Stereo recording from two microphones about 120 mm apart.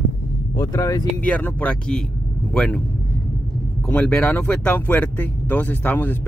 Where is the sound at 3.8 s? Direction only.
10° left (ahead or behind).